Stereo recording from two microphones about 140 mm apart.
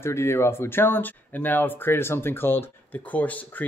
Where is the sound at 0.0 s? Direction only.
20° left (ahead or behind).